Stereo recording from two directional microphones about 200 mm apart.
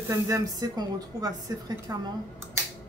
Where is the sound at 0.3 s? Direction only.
20° right (ahead or behind).